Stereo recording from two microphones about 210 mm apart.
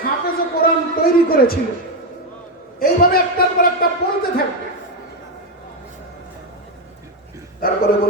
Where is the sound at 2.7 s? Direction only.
45° left (ahead or behind).